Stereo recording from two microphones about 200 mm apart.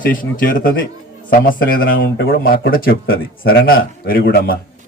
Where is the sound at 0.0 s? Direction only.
45° left (ahead or behind).